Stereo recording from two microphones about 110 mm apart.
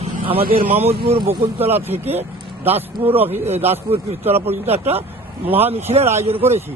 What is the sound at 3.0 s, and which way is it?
Speech, 25° right (ahead or behind).